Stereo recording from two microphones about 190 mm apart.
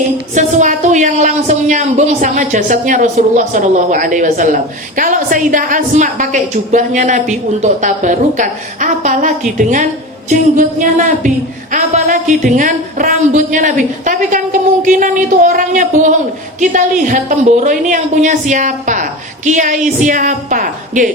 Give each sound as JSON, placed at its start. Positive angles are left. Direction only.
{"t": 0.3, "sound": "a woman's voice", "side_deg": -40}